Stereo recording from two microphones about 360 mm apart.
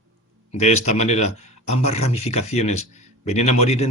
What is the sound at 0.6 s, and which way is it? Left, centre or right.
Speech, centre.